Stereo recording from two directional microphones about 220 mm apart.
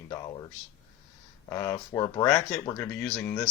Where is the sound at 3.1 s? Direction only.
Centre (ahead or behind).